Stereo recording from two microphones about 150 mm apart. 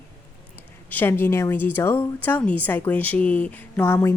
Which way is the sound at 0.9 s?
15° left (ahead or behind).